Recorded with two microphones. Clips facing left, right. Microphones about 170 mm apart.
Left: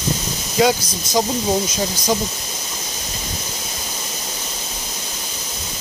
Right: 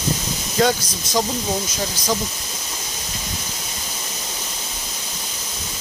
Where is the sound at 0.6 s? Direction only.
10° left (ahead or behind).